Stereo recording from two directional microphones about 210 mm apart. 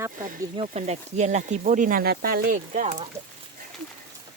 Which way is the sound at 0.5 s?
30° right (ahead or behind).